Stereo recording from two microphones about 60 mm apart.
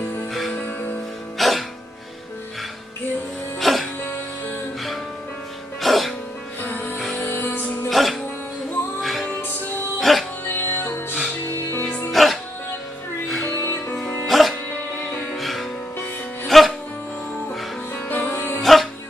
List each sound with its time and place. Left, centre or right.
0.0 s music: left
1.4 s music: centre
3.5 s music: centre
5.8 s music: centre
6.6 s music: left
7.9 s music: centre
10.5 s music: left
12.1 s music: centre
13.7 s music: left
14.2 s music: centre
18.0 s music: left
18.6 s music: centre